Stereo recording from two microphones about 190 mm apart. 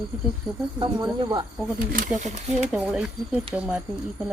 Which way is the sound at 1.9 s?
45° right (ahead or behind).